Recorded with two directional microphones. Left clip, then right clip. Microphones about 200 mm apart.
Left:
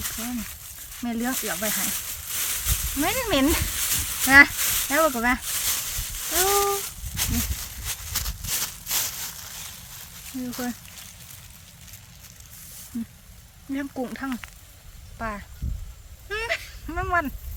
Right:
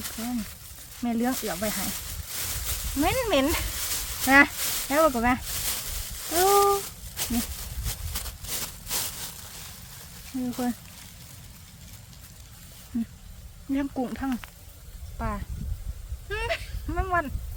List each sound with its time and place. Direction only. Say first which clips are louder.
0.0 s speech: left 1 dB; 5° right (ahead or behind)
0.9 s snake: right 1 dB; 10° right (ahead or behind)
10.5 s speech: right 1 dB; 10° right (ahead or behind)
13.7 s speech: right 1 dB; 15° right (ahead or behind)
16.3 s a sound: left 2 dB; 20° right (ahead or behind)